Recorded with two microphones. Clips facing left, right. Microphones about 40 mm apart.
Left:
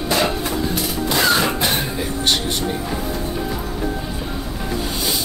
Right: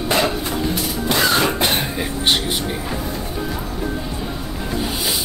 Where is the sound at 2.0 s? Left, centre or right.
Right.